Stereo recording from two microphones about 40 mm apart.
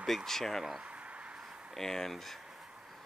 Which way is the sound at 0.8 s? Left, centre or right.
Right.